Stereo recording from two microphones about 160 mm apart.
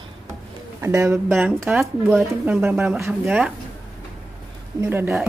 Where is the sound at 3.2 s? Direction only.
5° right (ahead or behind).